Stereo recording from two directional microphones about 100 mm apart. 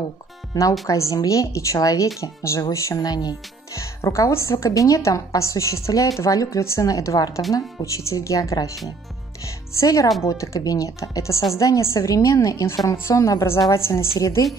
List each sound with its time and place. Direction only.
0.8 s a woman's voice: 30° left (ahead or behind)
3.8 s a woman's voice: 30° left (ahead or behind)
9.8 s a woman's voice: 30° left (ahead or behind)